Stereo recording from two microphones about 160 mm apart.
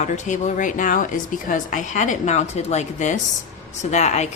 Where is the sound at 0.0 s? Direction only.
50° left (ahead or behind).